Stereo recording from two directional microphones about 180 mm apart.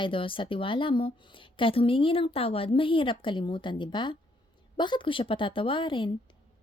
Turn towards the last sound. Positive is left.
turn(degrees=25)  # may be behind; listen again after turning